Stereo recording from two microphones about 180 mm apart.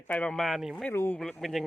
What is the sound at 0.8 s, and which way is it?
Speech, 10° left (ahead or behind).